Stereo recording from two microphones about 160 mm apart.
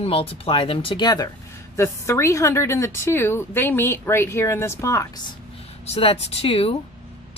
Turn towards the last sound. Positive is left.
turn(degrees=35)  # may be behind; listen again after turning